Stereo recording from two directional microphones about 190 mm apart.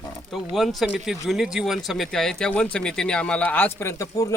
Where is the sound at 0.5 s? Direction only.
Centre (ahead or behind).